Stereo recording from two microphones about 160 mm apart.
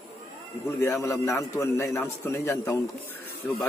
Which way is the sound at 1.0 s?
20° left (ahead or behind).